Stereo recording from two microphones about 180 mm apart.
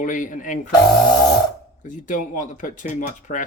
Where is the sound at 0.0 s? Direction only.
45° left (ahead or behind).